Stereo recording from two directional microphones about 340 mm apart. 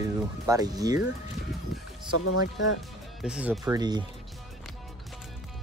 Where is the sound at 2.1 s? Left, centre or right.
Left.